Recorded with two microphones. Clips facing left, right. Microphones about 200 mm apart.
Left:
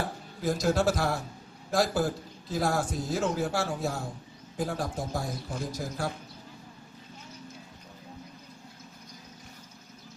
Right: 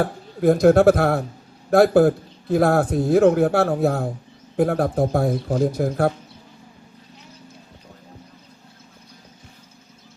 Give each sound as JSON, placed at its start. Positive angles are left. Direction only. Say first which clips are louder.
{"t": 0.0, "sound": "a man's voice", "louder": "right 12 dB", "side_deg": -60}